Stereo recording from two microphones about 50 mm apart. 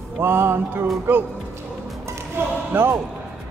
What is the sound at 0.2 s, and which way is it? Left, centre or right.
Music, right.